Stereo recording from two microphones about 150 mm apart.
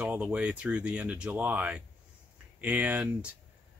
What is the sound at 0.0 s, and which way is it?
Speech, 10° right (ahead or behind).